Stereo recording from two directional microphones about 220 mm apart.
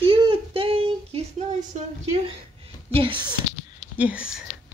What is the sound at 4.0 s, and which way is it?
Speech, 5° right (ahead or behind).